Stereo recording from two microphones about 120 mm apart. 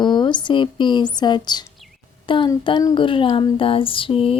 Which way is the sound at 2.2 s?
45° left (ahead or behind).